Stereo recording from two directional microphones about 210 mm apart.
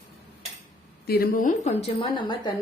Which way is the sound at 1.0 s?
45° left (ahead or behind).